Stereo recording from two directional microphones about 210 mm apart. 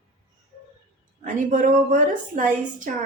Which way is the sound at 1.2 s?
40° right (ahead or behind).